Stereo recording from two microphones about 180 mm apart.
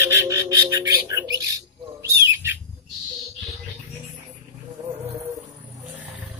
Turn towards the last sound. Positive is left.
turn(degrees=-10)  # may be behind; listen again after turning